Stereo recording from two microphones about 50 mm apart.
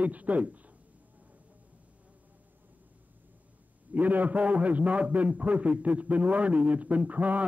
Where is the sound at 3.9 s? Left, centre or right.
Right.